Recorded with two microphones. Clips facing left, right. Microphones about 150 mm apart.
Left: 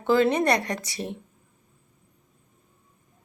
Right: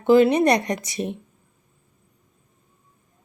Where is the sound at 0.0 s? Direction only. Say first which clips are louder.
Right 5 dB; 15° right (ahead or behind).